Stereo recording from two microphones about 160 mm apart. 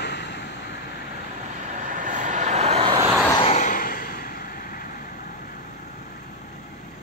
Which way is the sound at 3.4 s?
50° left (ahead or behind).